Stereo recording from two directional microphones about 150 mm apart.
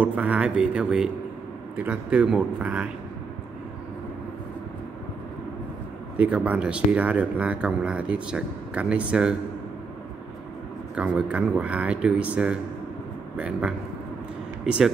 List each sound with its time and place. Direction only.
0.0 s speech: 10° right (ahead or behind)
6.1 s speech: 10° right (ahead or behind)
11.0 s speech: 10° right (ahead or behind)